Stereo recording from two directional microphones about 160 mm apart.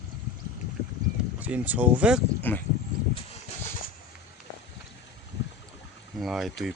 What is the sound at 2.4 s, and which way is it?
Speech, 10° left (ahead or behind).